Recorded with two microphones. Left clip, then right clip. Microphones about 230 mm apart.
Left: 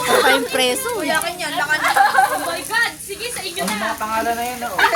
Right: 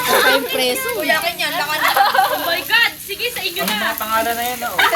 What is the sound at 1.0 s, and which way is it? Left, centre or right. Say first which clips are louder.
A woman's voice: right 5 dB; centre.